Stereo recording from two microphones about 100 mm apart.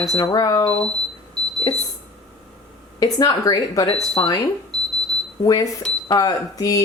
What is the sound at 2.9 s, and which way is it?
A woman's voice, 35° left (ahead or behind).